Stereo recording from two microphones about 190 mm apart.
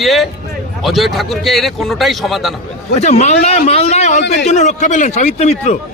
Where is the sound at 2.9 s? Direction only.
35° left (ahead or behind).